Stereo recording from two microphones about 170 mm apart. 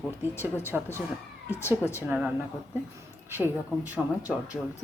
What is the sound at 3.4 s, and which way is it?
A man's voice, 10° right (ahead or behind).